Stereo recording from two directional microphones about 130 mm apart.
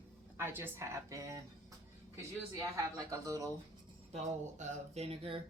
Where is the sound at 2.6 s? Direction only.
25° right (ahead or behind).